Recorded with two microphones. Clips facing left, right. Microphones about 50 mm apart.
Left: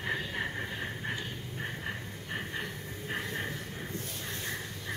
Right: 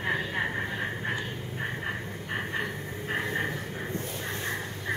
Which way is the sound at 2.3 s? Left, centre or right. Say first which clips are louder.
Right 6 dB; right.